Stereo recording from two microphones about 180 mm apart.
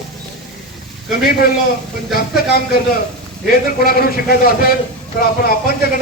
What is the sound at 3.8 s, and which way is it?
Speech, 55° left (ahead or behind).